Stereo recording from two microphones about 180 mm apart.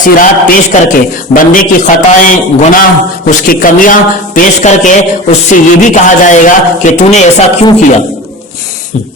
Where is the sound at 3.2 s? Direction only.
50° left (ahead or behind).